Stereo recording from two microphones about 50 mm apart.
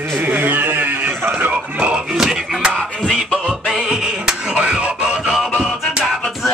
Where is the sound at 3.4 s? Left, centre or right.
Centre.